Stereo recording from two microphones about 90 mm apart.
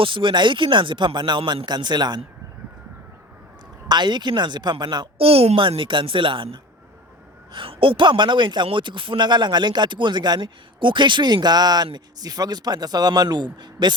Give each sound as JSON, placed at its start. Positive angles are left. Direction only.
{"t": 0.0, "sound": "a man's voice", "side_deg": -70}
{"t": 1.6, "sound": "a man's voice", "side_deg": -55}
{"t": 3.8, "sound": "a man's voice", "side_deg": -55}
{"t": 5.1, "sound": "a man's voice", "side_deg": -90}